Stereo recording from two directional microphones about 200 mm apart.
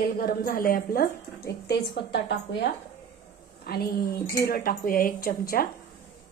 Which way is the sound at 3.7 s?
50° left (ahead or behind).